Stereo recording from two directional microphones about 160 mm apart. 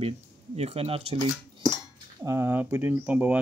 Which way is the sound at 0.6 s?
40° right (ahead or behind).